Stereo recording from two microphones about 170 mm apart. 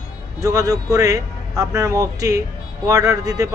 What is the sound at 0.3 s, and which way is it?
Speech, 20° right (ahead or behind).